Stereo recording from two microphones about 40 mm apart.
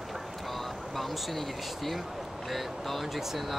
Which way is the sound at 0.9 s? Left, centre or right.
Centre.